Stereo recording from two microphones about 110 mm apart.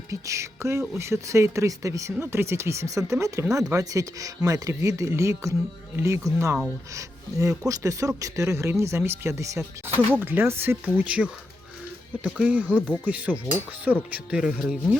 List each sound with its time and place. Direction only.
0.1 s speech: 25° right (ahead or behind); by 14.9 s 5° right (ahead or behind)